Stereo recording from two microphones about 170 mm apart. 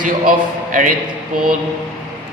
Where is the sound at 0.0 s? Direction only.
50° right (ahead or behind).